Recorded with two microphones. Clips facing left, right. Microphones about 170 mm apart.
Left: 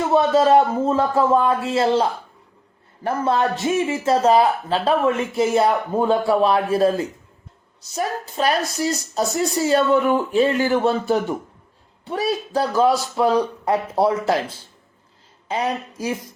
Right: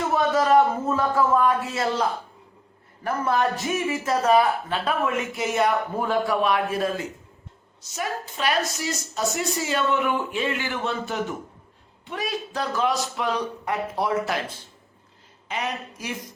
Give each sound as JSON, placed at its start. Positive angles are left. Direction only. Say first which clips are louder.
{"t": 0.1, "sound": "a woman's voice", "louder": "left 5 dB", "side_deg": 25}
{"t": 15.4, "sound": "speech", "louder": "left 6 dB", "side_deg": 35}